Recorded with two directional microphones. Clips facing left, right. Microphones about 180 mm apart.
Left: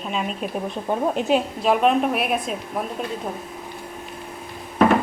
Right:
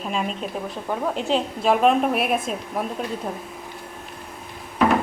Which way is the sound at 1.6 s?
Centre (ahead or behind).